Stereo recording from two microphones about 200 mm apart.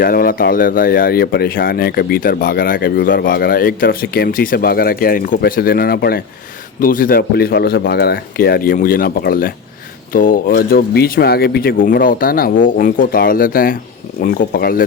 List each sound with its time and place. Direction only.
0.0 s speech: 45° left (ahead or behind)